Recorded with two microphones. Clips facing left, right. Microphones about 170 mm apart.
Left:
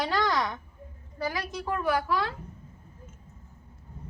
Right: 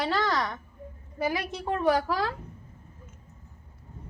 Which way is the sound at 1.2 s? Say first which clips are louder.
Right 3 dB; 25° right (ahead or behind).